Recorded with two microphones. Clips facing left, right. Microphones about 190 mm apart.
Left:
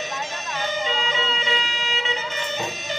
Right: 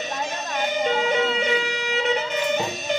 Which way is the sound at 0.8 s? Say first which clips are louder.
Right 6 dB; 55° right (ahead or behind).